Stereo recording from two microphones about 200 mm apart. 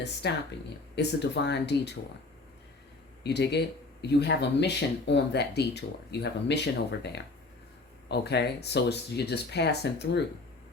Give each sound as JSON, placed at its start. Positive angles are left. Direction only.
{"t": 0.2, "sound": "speech", "side_deg": 55}
{"t": 3.2, "sound": "speech", "side_deg": 55}
{"t": 8.0, "sound": "speech", "side_deg": 55}